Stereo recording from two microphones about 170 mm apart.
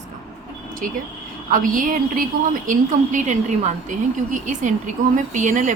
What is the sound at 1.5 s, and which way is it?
Speech, 50° right (ahead or behind).